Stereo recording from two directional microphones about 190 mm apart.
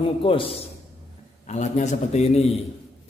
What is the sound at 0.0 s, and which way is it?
A man's voice, 30° left (ahead or behind).